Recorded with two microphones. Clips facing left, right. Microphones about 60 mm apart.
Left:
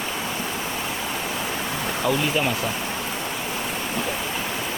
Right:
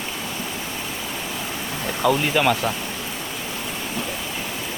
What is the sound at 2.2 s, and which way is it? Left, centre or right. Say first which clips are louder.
Speech: right 4 dB; right.